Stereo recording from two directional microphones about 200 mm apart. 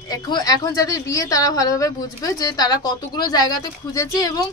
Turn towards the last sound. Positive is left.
turn(degrees=15)  # may be behind; listen again after turning